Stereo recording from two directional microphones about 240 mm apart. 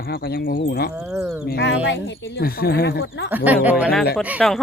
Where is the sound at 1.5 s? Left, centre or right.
Left.